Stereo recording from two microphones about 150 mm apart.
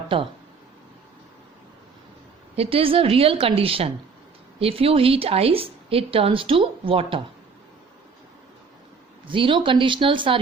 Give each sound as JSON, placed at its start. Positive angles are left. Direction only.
{"t": 2.6, "sound": "a woman's voice", "side_deg": -40}
{"t": 9.2, "sound": "a woman's voice", "side_deg": -35}